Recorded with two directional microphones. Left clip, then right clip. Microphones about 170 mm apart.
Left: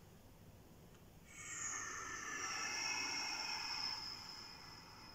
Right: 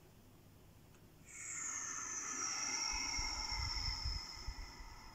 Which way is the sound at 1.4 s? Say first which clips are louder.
Right 1 dB; 15° right (ahead or behind).